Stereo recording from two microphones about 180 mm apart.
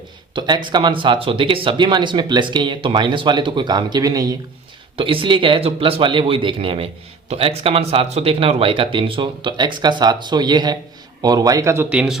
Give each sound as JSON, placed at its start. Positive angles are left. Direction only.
{"t": 0.3, "sound": "speech", "side_deg": -25}